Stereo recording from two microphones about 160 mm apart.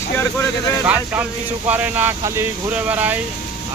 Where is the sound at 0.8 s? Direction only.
10° right (ahead or behind).